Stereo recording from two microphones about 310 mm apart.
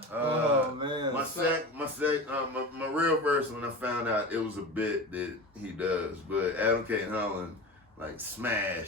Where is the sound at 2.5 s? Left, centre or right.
Centre.